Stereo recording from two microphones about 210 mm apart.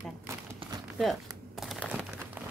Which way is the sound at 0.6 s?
25° right (ahead or behind).